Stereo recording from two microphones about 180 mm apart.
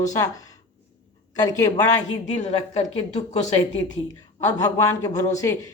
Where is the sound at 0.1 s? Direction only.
20° left (ahead or behind).